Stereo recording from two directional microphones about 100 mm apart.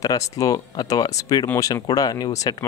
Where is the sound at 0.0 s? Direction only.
35° left (ahead or behind).